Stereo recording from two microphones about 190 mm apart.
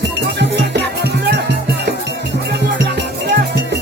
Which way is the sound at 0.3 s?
65° right (ahead or behind).